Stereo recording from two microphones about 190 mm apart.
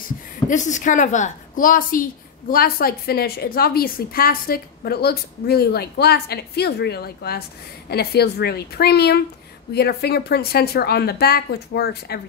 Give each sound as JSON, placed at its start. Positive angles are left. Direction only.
{"t": 0.5, "sound": "a woman's voice", "side_deg": 40}